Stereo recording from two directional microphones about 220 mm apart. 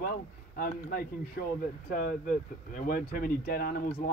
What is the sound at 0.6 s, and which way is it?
Speech, 45° left (ahead or behind).